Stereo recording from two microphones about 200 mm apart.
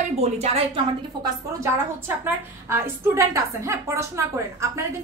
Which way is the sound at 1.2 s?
10° right (ahead or behind).